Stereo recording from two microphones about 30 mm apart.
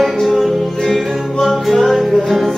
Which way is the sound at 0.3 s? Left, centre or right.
Centre.